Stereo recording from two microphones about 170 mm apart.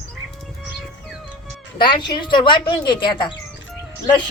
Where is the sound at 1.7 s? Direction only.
30° left (ahead or behind).